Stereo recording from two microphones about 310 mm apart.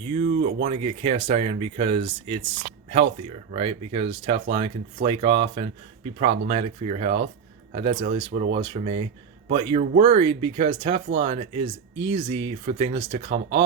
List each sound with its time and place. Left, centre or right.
0.1 s speech: centre
8.3 s speech: right
8.5 s speech: centre